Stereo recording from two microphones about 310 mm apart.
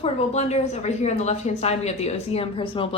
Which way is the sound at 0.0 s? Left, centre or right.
Centre.